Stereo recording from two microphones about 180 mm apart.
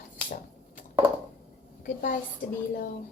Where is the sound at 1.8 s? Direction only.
50° left (ahead or behind).